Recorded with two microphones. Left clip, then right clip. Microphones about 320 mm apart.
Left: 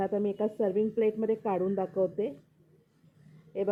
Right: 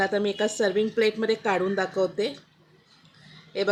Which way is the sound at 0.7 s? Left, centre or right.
Right.